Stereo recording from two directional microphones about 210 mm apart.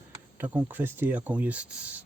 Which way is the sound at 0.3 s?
10° right (ahead or behind).